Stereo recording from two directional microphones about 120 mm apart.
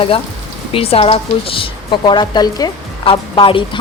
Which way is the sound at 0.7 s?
55° left (ahead or behind).